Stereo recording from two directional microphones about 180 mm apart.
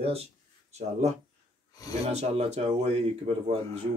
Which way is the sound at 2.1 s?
35° right (ahead or behind).